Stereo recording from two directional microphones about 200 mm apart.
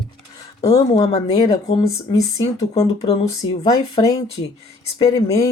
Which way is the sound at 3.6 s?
20° left (ahead or behind).